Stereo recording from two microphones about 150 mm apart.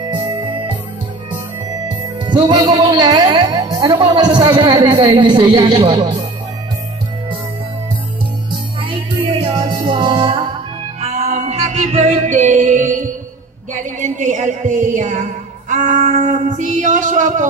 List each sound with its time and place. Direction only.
0.1 s music: 30° right (ahead or behind)
1.9 s speech: 30° right (ahead or behind)
8.5 s music: 35° right (ahead or behind)
11.0 s music: 50° right (ahead or behind)
13.8 s a sound: 55° right (ahead or behind)